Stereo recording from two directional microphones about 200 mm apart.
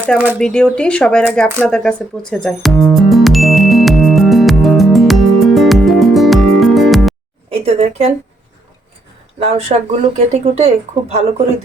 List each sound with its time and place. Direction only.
0.3 s speech: 5° left (ahead or behind)
1.6 s music: 5° left (ahead or behind)
7.5 s speech: 30° right (ahead or behind)
9.4 s speech: 30° right (ahead or behind)